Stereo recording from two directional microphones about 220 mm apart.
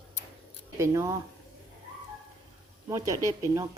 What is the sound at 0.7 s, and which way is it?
Speech, 15° right (ahead or behind).